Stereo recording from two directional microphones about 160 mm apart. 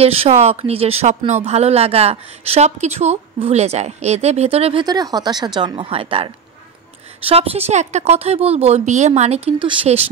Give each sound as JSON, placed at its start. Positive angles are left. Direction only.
{"t": 0.0, "sound": "speech", "side_deg": -40}
{"t": 4.8, "sound": "speech", "side_deg": -25}